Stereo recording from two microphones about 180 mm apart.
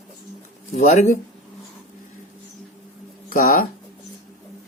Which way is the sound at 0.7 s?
40° left (ahead or behind).